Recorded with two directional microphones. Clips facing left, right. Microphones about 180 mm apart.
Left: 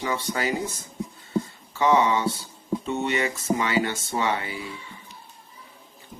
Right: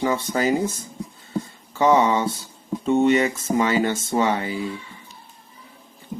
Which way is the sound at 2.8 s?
50° right (ahead or behind).